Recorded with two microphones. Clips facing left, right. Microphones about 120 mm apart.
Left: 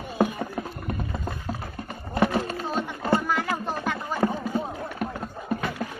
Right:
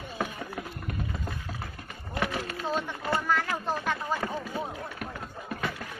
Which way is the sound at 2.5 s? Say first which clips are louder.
Left 2 dB; 35° left (ahead or behind).